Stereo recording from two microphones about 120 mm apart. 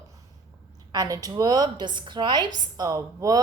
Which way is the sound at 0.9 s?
30° right (ahead or behind).